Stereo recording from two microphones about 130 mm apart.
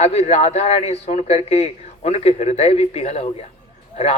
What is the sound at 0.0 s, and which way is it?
A man's voice, 55° left (ahead or behind).